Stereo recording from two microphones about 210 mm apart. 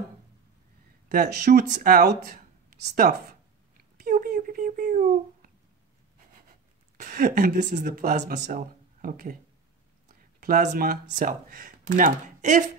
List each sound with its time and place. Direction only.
1.0 s speech: 50° right (ahead or behind)
4.0 s a sound: 45° right (ahead or behind)
7.0 s speech: 40° right (ahead or behind)
10.4 s speech: 40° right (ahead or behind)